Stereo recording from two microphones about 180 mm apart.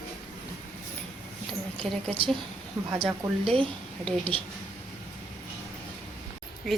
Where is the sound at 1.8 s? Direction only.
5° left (ahead or behind).